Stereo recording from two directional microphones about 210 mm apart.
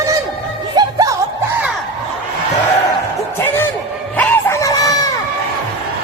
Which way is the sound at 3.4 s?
10° left (ahead or behind).